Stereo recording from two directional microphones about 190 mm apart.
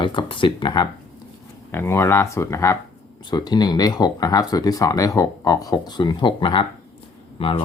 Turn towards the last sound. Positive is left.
turn(degrees=30)  # may be behind; listen again after turning